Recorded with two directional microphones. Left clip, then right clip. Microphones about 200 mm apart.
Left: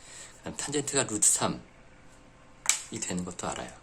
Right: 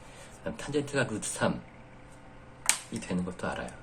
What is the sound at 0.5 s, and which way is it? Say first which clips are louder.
Speech: left 1 dB; 50° left (ahead or behind).